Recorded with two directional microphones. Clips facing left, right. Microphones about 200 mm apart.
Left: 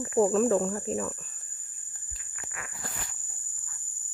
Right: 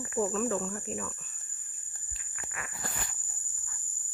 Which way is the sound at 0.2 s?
40° left (ahead or behind).